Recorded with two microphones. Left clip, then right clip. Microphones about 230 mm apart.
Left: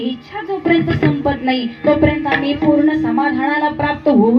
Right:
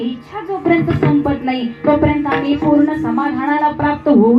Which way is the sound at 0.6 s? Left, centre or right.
Left.